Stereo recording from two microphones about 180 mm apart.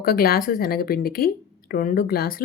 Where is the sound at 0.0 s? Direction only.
55° left (ahead or behind).